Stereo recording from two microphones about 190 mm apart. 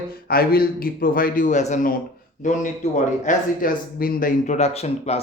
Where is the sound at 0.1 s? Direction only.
50° left (ahead or behind).